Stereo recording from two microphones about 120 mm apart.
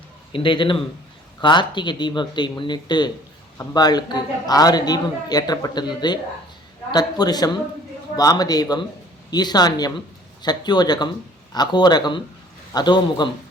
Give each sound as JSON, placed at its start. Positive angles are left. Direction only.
{"t": 0.3, "sound": "a man's voice", "side_deg": 45}